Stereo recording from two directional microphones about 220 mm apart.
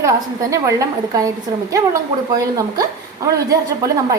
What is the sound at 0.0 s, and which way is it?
A woman's voice, 15° right (ahead or behind).